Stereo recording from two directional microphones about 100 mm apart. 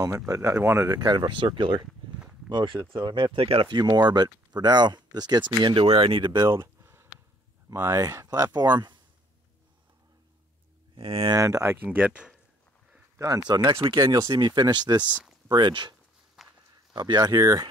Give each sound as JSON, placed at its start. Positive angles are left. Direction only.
{"t": 0.3, "sound": "speech", "side_deg": -30}
{"t": 3.3, "sound": "speech", "side_deg": -70}
{"t": 3.7, "sound": "speech", "side_deg": -45}
{"t": 6.4, "sound": "a sound", "side_deg": -30}
{"t": 7.7, "sound": "speech", "side_deg": -30}
{"t": 11.0, "sound": "speech", "side_deg": -70}
{"t": 11.2, "sound": "speech", "side_deg": -35}
{"t": 11.7, "sound": "speech", "side_deg": -20}
{"t": 13.5, "sound": "speech", "side_deg": -45}
{"t": 15.0, "sound": "speech", "side_deg": -10}
{"t": 15.5, "sound": "speech", "side_deg": -50}
{"t": 16.4, "sound": "pig", "side_deg": 0}
{"t": 16.9, "sound": "speech", "side_deg": -45}